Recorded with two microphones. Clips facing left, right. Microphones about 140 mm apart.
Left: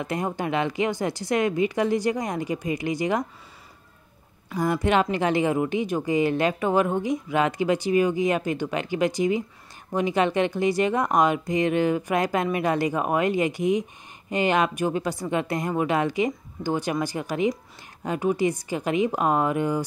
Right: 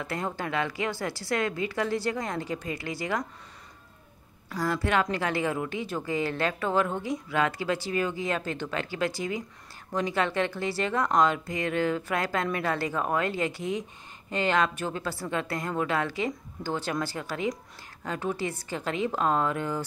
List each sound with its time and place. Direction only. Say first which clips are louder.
0.0 s speech: left 5 dB; 15° left (ahead or behind)
4.6 s speech: left 5 dB; 20° left (ahead or behind)